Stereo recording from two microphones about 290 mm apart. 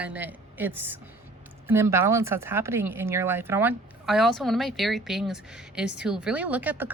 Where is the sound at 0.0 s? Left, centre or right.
Centre.